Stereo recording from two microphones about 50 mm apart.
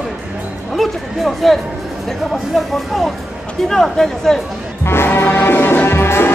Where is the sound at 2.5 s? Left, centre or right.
Centre.